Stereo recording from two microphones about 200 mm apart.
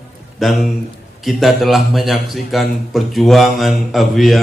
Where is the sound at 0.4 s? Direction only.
Centre (ahead or behind).